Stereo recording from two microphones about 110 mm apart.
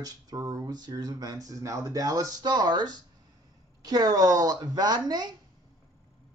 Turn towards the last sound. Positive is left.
turn(degrees=-40)  # may be behind; listen again after turning